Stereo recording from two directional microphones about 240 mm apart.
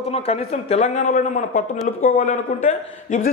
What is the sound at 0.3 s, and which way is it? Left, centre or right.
A man's voice, left.